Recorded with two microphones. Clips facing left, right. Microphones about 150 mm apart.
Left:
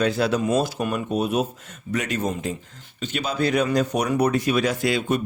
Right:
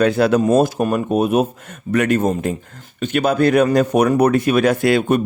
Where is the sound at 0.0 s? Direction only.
55° right (ahead or behind).